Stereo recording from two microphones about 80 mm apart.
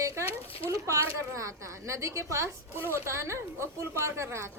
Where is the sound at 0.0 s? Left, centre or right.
Right.